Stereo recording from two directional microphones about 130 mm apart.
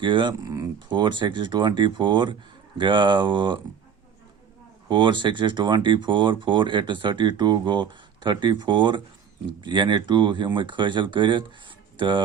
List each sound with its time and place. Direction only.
0.0 s speech: 40° right (ahead or behind)
4.9 s speech: 35° right (ahead or behind)